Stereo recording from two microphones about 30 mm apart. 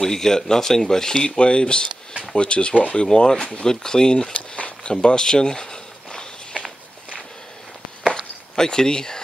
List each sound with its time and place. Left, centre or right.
0.0 s speech: centre
1.2 s speech: left
3.2 s speech: left
4.6 s a sound: left
5.2 s walk: left
8.5 s speech: left